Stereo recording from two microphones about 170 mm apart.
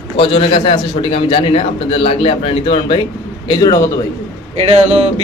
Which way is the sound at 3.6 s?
20° left (ahead or behind).